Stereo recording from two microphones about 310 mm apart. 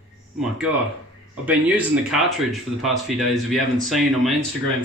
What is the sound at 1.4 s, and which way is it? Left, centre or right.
Speech, centre.